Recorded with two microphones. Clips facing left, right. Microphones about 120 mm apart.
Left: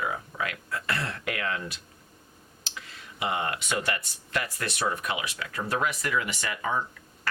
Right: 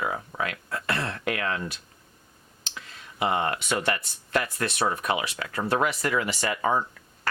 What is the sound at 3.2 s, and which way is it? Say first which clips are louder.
Speech: right 4 dB; 45° right (ahead or behind).